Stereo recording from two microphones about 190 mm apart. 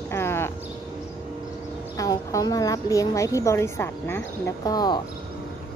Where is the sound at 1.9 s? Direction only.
20° left (ahead or behind).